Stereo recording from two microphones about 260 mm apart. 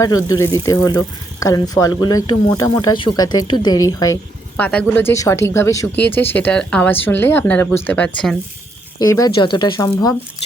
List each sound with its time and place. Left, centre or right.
0.0 s speech: centre